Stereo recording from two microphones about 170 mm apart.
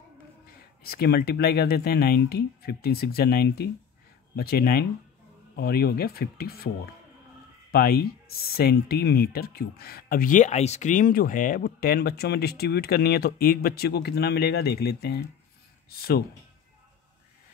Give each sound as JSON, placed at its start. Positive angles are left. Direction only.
{"t": 0.8, "sound": "speech", "side_deg": 65}
{"t": 7.7, "sound": "speech", "side_deg": 65}